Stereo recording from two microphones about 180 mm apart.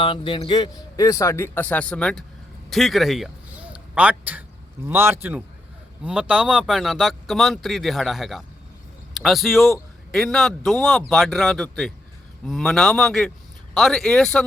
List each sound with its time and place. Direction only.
0.0 s a man's voice: 25° left (ahead or behind); by 2.2 s 5° left (ahead or behind)
2.6 s a sound: centre (ahead or behind)
4.9 s a man's voice: 10° right (ahead or behind); by 14.4 s 5° left (ahead or behind)